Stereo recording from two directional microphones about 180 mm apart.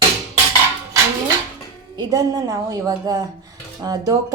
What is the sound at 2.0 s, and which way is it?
A woman's voice, 20° right (ahead or behind).